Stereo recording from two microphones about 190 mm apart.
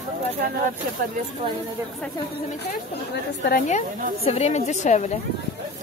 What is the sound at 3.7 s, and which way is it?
A woman's voice, 35° left (ahead or behind).